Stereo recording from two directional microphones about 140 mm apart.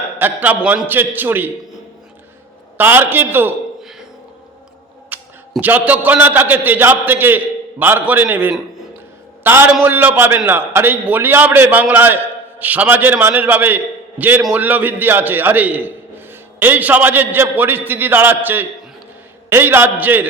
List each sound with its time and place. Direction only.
0.2 s a man's voice: 15° right (ahead or behind)
2.7 s a man's voice: 15° right (ahead or behind)
5.0 s a man's voice: 10° right (ahead or behind)